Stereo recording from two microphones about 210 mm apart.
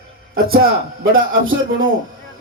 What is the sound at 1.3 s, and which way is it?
Speech, 65° right (ahead or behind).